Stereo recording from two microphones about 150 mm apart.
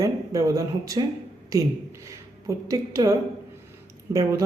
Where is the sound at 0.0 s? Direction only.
20° right (ahead or behind).